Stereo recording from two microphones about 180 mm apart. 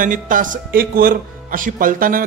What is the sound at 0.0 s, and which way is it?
Speech, 50° right (ahead or behind).